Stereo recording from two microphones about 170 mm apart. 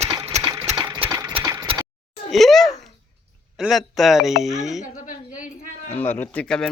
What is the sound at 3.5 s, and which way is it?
A man's voice, centre (ahead or behind).